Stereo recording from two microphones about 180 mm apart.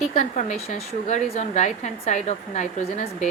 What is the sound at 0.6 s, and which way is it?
A woman's voice, 35° left (ahead or behind).